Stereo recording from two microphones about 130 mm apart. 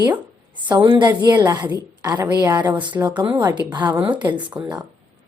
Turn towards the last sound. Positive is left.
turn(degrees=-10)  # may be behind; listen again after turning